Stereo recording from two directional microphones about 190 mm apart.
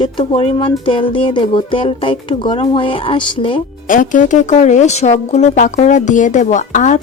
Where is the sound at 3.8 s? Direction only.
45° left (ahead or behind).